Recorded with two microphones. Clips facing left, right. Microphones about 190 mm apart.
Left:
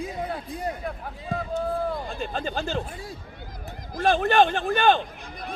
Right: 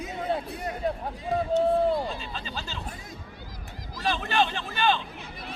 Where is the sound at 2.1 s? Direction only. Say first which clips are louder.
Left 6 dB; 50° left (ahead or behind).